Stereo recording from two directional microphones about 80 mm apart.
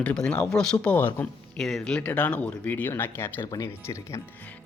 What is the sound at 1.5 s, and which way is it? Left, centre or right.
Speech, centre.